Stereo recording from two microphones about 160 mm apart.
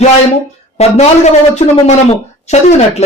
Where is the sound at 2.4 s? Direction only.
45° left (ahead or behind).